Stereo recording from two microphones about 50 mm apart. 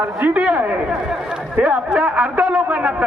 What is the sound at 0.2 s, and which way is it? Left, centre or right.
A man's voice, right.